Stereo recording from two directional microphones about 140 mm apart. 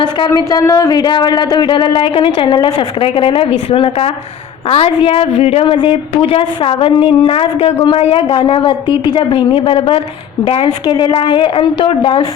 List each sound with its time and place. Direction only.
0.3 s a woman's voice: 25° left (ahead or behind)